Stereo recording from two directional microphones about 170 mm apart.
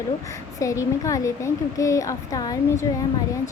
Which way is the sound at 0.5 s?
20° left (ahead or behind).